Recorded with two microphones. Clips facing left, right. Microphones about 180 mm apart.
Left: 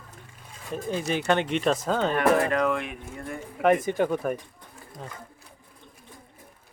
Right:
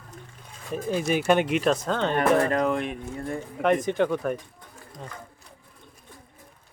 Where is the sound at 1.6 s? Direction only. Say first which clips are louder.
Even; centre (ahead or behind).